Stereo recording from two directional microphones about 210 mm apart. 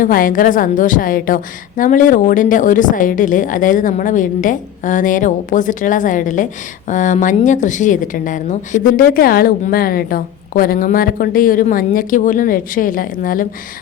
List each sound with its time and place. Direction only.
0.0 s a woman's voice: 40° left (ahead or behind)